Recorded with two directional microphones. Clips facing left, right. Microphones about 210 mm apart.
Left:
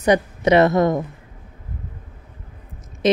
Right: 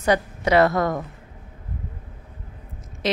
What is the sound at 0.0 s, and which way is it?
Speech, 20° left (ahead or behind).